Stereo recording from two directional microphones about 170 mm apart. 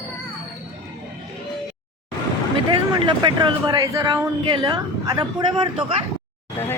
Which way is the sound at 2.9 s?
30° right (ahead or behind).